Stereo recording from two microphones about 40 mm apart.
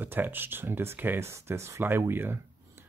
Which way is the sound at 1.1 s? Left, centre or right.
Right.